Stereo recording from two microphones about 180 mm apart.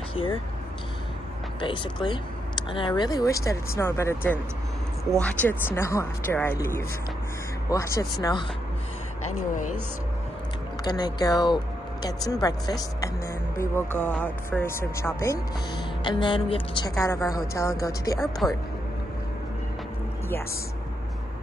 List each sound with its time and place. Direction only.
0.1 s speech: 30° left (ahead or behind)
1.6 s speech: 25° left (ahead or behind)
10.8 s speech: 20° left (ahead or behind)
13.9 s speech: 5° left (ahead or behind)
16.0 s speech: 25° left (ahead or behind)
17.0 s speech: 15° left (ahead or behind)
18.4 s speech: centre (ahead or behind)